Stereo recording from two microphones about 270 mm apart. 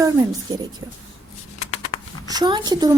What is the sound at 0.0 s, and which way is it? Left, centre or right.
Speech, centre.